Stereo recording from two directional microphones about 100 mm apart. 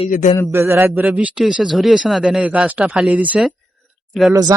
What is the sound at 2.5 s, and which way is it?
Speech, 15° right (ahead or behind).